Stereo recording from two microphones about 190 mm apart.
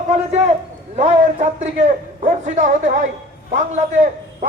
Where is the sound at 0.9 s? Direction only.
35° right (ahead or behind).